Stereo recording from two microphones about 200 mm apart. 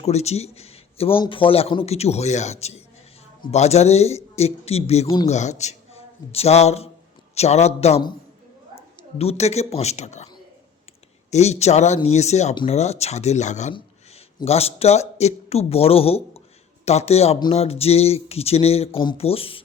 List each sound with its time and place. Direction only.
0.0 s speech: 35° left (ahead or behind)
5.0 s speech: 20° left (ahead or behind)
5.3 s a man's voice: 35° left (ahead or behind)
11.3 s speech: 35° left (ahead or behind)